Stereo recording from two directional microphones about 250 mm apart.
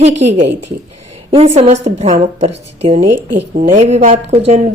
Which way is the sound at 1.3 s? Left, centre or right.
Right.